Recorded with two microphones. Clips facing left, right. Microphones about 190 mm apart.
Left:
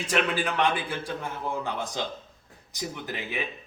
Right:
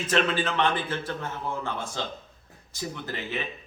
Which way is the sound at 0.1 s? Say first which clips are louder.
Right 1 dB; 10° left (ahead or behind).